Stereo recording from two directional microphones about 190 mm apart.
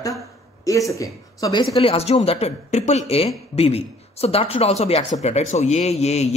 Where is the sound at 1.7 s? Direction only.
30° left (ahead or behind).